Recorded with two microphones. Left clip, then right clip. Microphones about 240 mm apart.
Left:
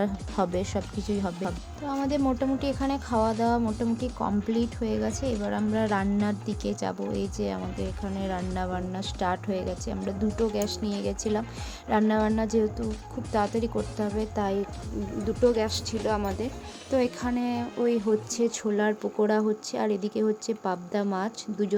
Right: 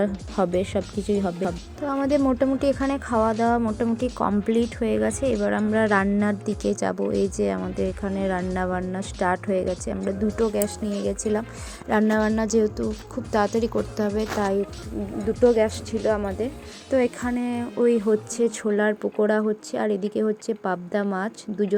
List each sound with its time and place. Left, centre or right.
0.0 s speech: centre